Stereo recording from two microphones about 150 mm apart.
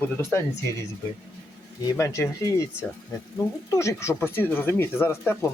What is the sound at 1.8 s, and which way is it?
Speech, 20° left (ahead or behind).